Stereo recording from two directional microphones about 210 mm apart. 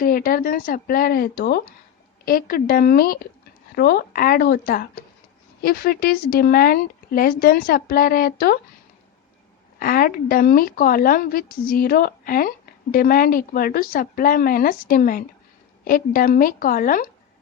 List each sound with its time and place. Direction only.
0.0 s speech: 45° left (ahead or behind)
9.8 s speech: 45° left (ahead or behind)